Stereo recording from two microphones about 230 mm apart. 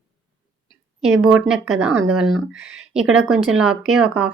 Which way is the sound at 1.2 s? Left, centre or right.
Centre.